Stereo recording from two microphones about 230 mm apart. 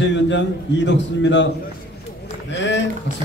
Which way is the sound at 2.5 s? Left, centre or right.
Left.